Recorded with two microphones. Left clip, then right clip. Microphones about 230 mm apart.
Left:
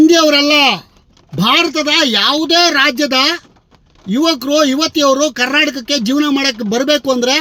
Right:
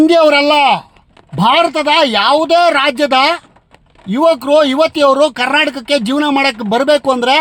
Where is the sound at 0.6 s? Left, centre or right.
Right.